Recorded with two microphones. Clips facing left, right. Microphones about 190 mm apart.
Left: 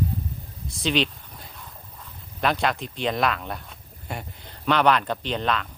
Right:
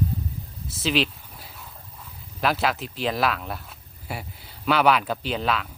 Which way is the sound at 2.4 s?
5° right (ahead or behind).